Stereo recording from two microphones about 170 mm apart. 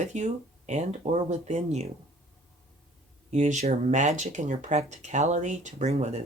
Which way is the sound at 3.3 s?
45° right (ahead or behind).